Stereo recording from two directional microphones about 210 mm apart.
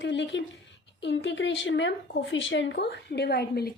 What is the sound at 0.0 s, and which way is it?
Speech, 60° left (ahead or behind).